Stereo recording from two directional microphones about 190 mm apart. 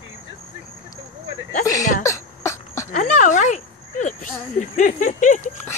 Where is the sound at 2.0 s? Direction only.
15° left (ahead or behind).